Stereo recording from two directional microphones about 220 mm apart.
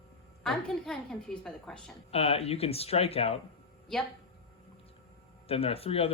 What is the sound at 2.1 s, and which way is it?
Speech, 25° left (ahead or behind).